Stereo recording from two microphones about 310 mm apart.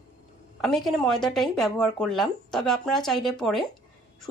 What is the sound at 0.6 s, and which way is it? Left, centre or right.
A woman's voice, centre.